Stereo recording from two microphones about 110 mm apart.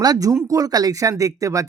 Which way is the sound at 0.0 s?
35° right (ahead or behind).